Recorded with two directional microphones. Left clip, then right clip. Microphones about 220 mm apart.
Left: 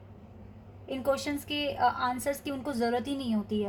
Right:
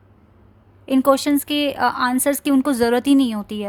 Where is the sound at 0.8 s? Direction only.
50° right (ahead or behind).